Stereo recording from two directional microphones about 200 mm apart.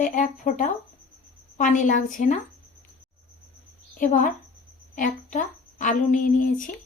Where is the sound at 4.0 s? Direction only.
40° left (ahead or behind).